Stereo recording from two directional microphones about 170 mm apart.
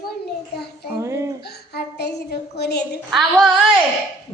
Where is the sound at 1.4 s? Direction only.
70° left (ahead or behind).